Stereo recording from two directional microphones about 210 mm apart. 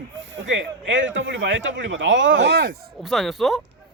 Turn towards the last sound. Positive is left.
turn(degrees=0)  # may be behind; listen again after turning